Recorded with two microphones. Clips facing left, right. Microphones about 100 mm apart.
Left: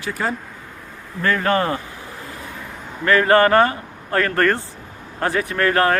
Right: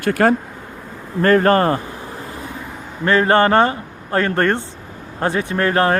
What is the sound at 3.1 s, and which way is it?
A man's voice, 25° right (ahead or behind).